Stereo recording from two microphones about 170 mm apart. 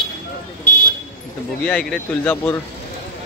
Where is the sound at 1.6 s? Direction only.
5° left (ahead or behind).